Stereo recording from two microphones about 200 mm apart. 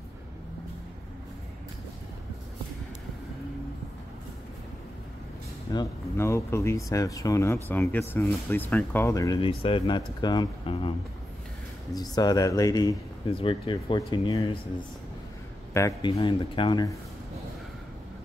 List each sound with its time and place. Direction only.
5.7 s speech: 15° left (ahead or behind)
11.9 s speech: 20° left (ahead or behind)
15.7 s speech: 15° left (ahead or behind)
16.2 s speech: 25° left (ahead or behind)